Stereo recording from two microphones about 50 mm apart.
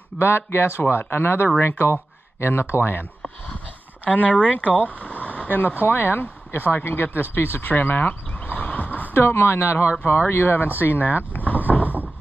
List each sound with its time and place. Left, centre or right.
0.2 s speech: left
4.0 s speech: left
7.3 s a sound: left
9.1 s speech: left
10.0 s speech: left
11.3 s vehicle: left
11.8 s vehicle: right